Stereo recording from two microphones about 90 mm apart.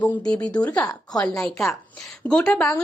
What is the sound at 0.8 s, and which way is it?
Speech, 40° left (ahead or behind).